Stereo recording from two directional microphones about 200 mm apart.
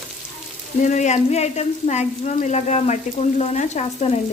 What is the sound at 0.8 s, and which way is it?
Stir, 35° left (ahead or behind).